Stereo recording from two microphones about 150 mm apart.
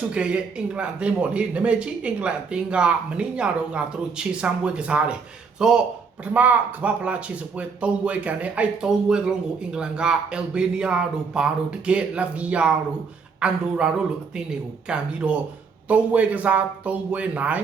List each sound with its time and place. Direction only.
0.1 s speech: 5° right (ahead or behind)